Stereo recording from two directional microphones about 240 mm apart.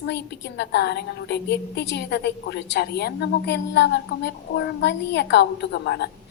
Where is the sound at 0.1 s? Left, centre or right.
Left.